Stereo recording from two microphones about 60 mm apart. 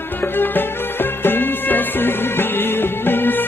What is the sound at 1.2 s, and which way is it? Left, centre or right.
Music, left.